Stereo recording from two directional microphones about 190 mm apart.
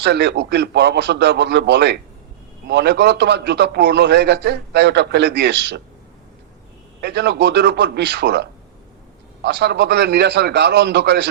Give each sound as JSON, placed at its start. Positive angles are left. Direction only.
{"t": 0.0, "sound": "a man's voice", "side_deg": -65}
{"t": 7.0, "sound": "a man's voice", "side_deg": -65}